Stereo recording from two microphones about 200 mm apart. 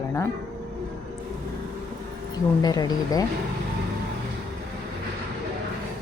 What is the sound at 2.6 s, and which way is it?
Speech, 20° left (ahead or behind).